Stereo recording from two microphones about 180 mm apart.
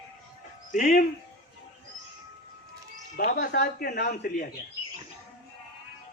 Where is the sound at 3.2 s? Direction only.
60° left (ahead or behind).